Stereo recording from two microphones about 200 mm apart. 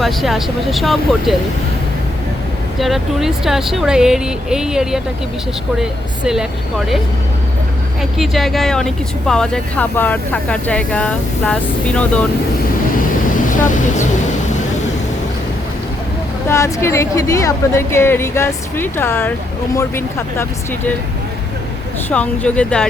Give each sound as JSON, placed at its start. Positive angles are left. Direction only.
{"t": 0.0, "sound": "speech", "side_deg": 0}
{"t": 2.7, "sound": "speech", "side_deg": 0}
{"t": 8.2, "sound": "speech", "side_deg": 0}
{"t": 13.5, "sound": "speech", "side_deg": 40}
{"t": 16.5, "sound": "a woman's voice", "side_deg": 15}
{"t": 22.1, "sound": "speech", "side_deg": 5}